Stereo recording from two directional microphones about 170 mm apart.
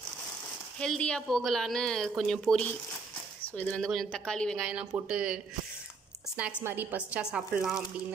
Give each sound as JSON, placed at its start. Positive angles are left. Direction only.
{"t": 0.7, "sound": "a woman's voice", "side_deg": 5}
{"t": 3.5, "sound": "a woman's voice", "side_deg": 5}